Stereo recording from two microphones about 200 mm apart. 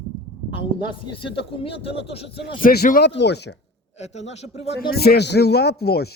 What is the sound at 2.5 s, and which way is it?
Speech, 45° left (ahead or behind).